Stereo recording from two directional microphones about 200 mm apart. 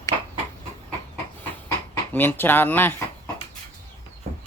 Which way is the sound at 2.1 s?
10° left (ahead or behind).